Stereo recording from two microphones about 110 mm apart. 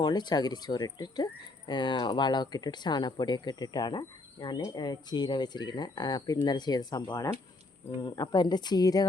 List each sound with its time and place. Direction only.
0.0 s speech: 40° left (ahead or behind)